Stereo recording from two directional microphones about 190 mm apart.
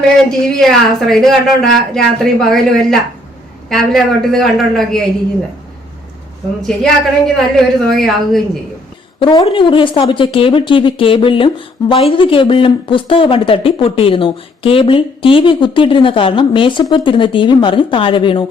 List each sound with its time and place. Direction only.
0.3 s speech: 5° left (ahead or behind)
6.6 s speech: centre (ahead or behind)
9.2 s speech: 25° left (ahead or behind)